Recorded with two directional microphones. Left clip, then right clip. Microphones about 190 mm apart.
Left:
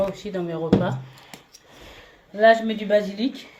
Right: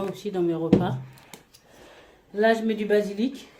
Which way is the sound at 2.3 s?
45° right (ahead or behind).